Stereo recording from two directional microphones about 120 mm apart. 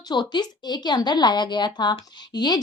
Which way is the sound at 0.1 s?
40° left (ahead or behind).